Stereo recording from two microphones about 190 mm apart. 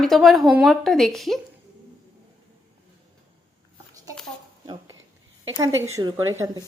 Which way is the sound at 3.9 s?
20° right (ahead or behind).